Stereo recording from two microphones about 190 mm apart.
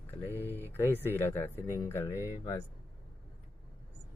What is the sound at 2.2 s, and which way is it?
Speech, 10° right (ahead or behind).